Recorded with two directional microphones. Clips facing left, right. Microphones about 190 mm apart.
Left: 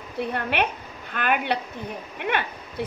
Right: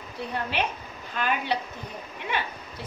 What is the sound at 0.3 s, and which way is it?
A woman's voice, 60° left (ahead or behind).